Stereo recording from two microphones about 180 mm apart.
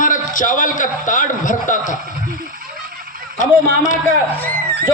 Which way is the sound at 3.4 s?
45° left (ahead or behind).